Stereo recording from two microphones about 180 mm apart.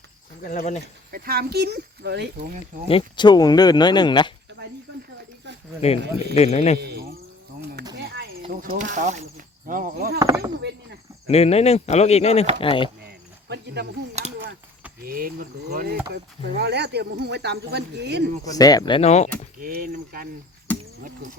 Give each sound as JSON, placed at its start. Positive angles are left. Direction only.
{"t": 0.4, "sound": "speech", "side_deg": 40}
{"t": 1.1, "sound": "speech", "side_deg": -55}
{"t": 2.9, "sound": "speech", "side_deg": 25}
{"t": 6.3, "sound": "speech", "side_deg": 35}
{"t": 6.7, "sound": "speech", "side_deg": -60}
{"t": 8.4, "sound": "speech", "side_deg": -45}
{"t": 10.2, "sound": "speech", "side_deg": -15}
{"t": 11.3, "sound": "speech", "side_deg": 35}
{"t": 13.0, "sound": "cricket", "side_deg": -65}
{"t": 15.0, "sound": "speech", "side_deg": -55}
{"t": 18.4, "sound": "speech", "side_deg": 20}
{"t": 19.5, "sound": "speech", "side_deg": -55}